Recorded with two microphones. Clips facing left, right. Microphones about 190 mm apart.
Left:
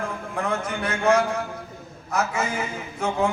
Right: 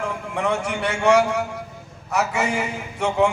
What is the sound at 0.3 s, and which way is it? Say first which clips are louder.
A man's voice: right 3 dB; 75° right (ahead or behind).